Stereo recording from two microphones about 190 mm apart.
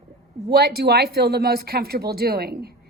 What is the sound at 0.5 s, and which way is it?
A woman's voice, 55° right (ahead or behind).